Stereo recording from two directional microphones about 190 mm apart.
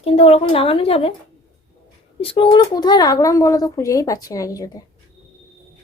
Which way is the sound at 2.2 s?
30° left (ahead or behind).